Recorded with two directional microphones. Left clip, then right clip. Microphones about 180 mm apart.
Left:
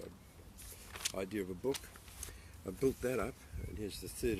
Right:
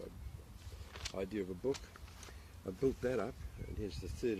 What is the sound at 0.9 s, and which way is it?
Speech, 5° left (ahead or behind).